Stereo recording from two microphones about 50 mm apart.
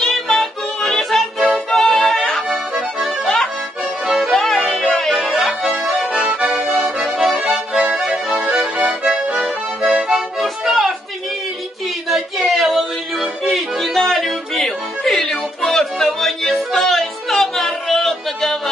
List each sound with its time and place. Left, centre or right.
0.0 s music: centre
3.2 s accordion: centre
4.0 s music: centre
5.8 s accordion: centre
6.0 s accordion: centre
6.6 s accordion: centre
8.5 s accordion: right
9.8 s accordion: centre
12.1 s music: centre